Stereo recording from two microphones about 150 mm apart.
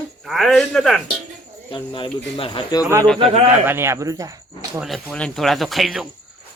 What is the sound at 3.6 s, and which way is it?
Speech, 15° right (ahead or behind).